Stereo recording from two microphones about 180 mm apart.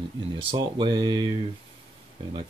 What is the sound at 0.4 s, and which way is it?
Speech, 25° right (ahead or behind).